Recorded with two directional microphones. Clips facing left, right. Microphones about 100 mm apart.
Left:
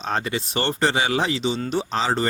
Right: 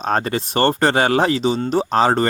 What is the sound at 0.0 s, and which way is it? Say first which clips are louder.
Speech: right 5 dB; 45° right (ahead or behind).